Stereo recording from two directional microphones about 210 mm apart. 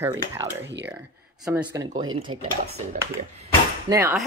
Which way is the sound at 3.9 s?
10° right (ahead or behind).